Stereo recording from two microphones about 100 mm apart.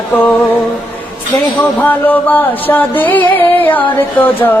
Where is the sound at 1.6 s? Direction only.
15° left (ahead or behind).